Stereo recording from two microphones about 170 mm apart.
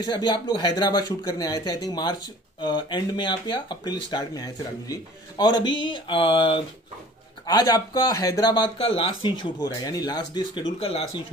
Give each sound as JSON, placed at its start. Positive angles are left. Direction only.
{"t": 0.0, "sound": "speech", "side_deg": 25}